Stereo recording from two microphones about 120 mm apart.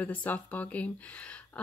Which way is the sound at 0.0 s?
15° left (ahead or behind).